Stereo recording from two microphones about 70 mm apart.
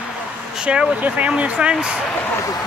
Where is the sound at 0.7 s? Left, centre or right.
Centre.